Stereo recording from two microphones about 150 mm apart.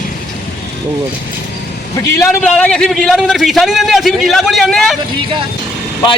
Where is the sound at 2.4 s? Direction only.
5° left (ahead or behind).